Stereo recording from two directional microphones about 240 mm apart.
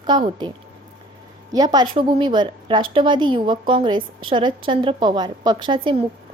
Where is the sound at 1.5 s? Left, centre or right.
Centre.